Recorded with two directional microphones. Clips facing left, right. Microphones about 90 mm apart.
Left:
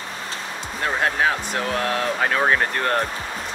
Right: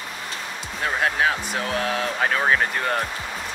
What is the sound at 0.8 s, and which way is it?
Speech, centre (ahead or behind).